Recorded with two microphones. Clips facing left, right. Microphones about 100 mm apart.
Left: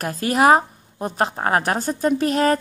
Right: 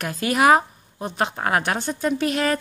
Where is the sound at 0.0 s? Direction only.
35° left (ahead or behind).